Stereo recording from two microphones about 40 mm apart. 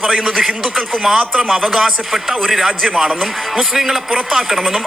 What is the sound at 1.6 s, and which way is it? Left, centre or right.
A man's voice, centre.